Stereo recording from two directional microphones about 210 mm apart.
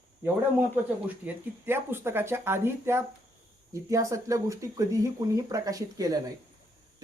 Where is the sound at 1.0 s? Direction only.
10° right (ahead or behind).